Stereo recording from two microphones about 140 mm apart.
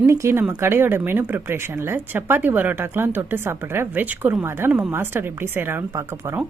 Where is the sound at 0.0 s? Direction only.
20° right (ahead or behind).